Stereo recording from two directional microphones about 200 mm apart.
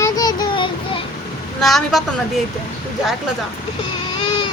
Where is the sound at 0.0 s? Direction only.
20° left (ahead or behind).